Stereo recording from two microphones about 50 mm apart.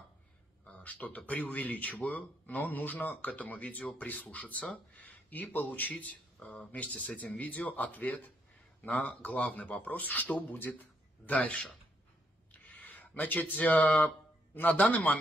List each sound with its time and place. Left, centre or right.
0.7 s speech: left
12.6 s a sound: left
14.9 s speech: left